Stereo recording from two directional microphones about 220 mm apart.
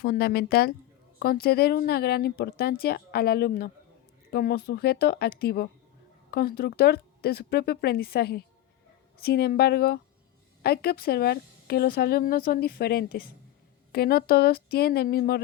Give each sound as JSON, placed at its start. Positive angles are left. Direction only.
{"t": 0.0, "sound": "a woman's voice", "side_deg": 45}